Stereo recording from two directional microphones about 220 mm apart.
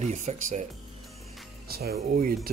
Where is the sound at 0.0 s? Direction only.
30° right (ahead or behind).